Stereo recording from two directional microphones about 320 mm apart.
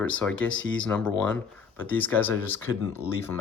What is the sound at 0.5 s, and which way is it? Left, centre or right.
Speech, left.